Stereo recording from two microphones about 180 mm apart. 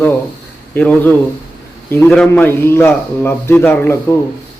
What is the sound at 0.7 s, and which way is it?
A man's voice, 10° left (ahead or behind).